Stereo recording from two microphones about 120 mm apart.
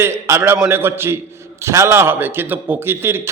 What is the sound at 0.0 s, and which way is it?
A man's voice, 20° right (ahead or behind).